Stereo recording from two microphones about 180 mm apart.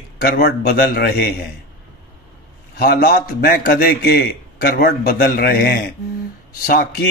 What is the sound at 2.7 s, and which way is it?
A man's voice, 60° left (ahead or behind).